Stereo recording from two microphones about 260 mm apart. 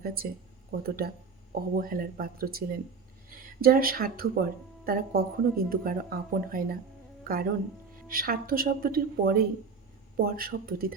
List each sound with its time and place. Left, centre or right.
0.0 s speech: right
8.0 s speech: right